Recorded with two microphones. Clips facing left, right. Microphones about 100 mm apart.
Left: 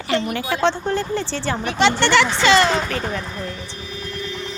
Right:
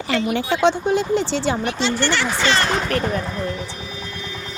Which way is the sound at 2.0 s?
90° left.